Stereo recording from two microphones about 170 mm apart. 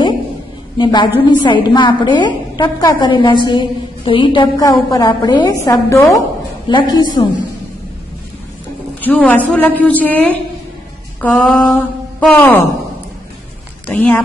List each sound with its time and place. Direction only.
0.7 s a woman's voice: 25° left (ahead or behind)
9.0 s a woman's voice: 10° left (ahead or behind)
13.8 s a woman's voice: 10° left (ahead or behind)